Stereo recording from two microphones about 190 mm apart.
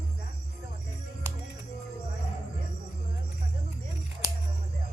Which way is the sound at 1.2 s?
15° right (ahead or behind).